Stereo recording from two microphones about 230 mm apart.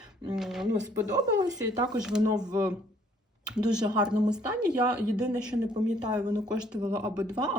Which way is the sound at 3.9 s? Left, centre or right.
Centre.